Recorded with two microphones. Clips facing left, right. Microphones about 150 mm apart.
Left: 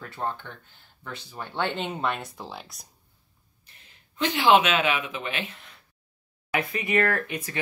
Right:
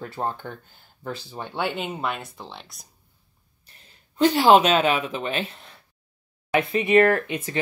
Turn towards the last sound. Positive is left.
turn(degrees=-25)  # may be behind; listen again after turning